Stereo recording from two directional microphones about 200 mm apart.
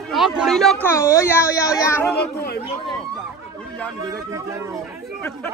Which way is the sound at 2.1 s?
50° left (ahead or behind).